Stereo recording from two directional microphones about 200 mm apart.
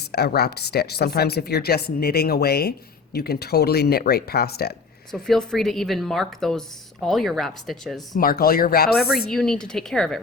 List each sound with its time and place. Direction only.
0.1 s speech: 55° left (ahead or behind)
5.1 s a woman's voice: centre (ahead or behind)
8.1 s speech: 45° left (ahead or behind)
9.0 s a woman's voice: centre (ahead or behind)